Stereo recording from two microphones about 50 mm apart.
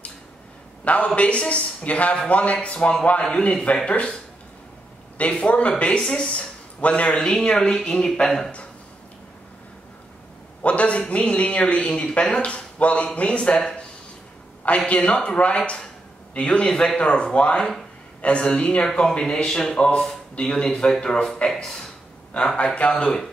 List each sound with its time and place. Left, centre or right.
0.8 s speech: left
5.3 s speech: left
7.2 s a man's voice: centre
10.6 s speech: left
14.9 s a man's voice: left; by 21.8 s centre
22.8 s speech: left